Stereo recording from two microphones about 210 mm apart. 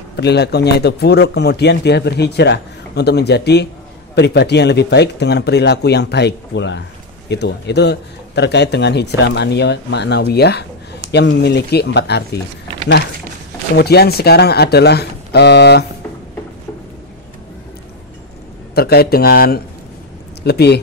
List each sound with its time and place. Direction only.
0.1 s a man's voice: 55° left (ahead or behind)
13.7 s a man's voice: 50° left (ahead or behind)
18.8 s a man's voice: 50° left (ahead or behind)